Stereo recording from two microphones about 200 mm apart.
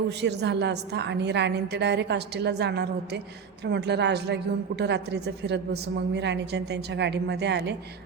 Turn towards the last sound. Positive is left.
turn(degrees=-60)  # may be behind; listen again after turning